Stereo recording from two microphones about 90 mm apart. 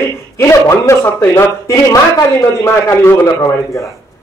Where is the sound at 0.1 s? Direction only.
30° left (ahead or behind).